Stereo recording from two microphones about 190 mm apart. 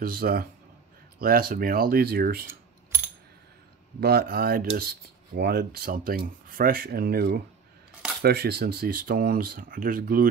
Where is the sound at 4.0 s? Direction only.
55° right (ahead or behind).